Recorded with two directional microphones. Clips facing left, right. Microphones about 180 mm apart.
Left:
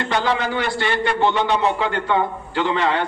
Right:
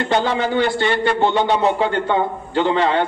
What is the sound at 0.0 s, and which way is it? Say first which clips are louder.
Speech: right 3 dB; 25° right (ahead or behind).